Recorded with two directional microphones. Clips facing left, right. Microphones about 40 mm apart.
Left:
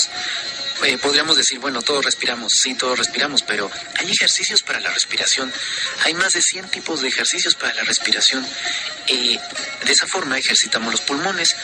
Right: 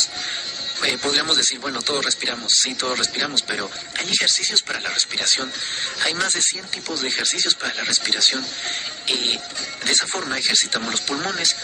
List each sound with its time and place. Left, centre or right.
0.8 s a man's voice: left